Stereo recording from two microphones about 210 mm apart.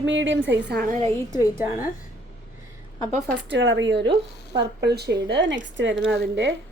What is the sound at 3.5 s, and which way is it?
A woman's voice, 60° right (ahead or behind).